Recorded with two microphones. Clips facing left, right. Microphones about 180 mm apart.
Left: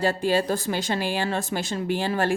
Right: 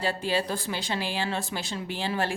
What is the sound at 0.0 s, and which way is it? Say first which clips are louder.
Speech: left 5 dB; 45° left (ahead or behind).